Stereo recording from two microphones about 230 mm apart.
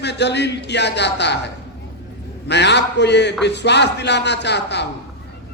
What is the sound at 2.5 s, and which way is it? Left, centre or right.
A man's voice, left.